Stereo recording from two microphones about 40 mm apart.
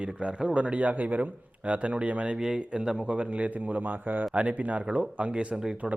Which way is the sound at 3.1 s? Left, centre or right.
Right.